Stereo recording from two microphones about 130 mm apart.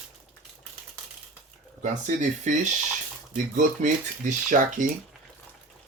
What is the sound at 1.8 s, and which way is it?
Speech, 70° right (ahead or behind).